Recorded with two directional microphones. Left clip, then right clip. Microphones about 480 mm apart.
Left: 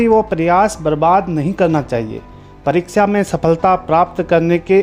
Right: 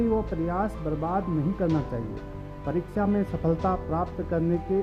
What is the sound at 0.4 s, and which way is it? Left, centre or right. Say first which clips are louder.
A man's voice: left 16 dB; centre.